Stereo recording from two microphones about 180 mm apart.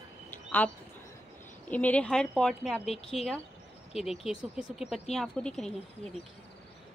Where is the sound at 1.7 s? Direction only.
10° left (ahead or behind).